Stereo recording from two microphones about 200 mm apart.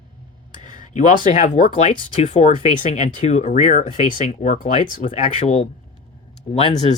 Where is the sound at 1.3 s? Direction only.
40° left (ahead or behind).